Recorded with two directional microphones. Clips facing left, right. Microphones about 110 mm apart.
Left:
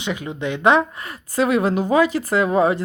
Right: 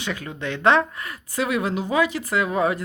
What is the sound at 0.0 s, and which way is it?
Speech, 20° left (ahead or behind).